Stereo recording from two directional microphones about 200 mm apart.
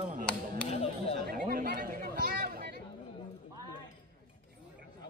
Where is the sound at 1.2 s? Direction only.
45° right (ahead or behind).